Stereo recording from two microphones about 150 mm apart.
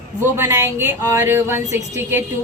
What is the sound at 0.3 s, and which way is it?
Speech, 20° right (ahead or behind).